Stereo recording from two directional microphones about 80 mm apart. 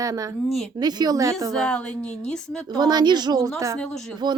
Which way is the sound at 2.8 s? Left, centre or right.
Right.